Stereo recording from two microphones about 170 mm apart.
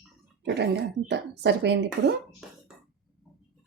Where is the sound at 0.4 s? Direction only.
85° right.